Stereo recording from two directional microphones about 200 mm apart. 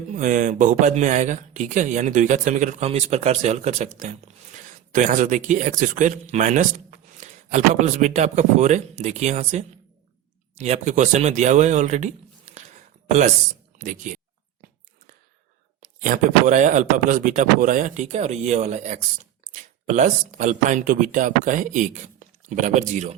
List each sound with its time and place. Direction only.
0.1 s speech: 40° right (ahead or behind)
15.8 s speech: 40° right (ahead or behind)